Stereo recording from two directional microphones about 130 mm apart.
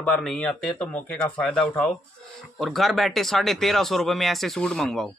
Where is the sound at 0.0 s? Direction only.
5° left (ahead or behind).